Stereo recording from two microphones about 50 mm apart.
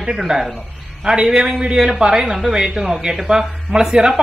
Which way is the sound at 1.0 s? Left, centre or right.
Centre.